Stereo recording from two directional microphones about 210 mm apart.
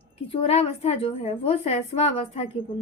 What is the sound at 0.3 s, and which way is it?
A woman's voice, 25° left (ahead or behind).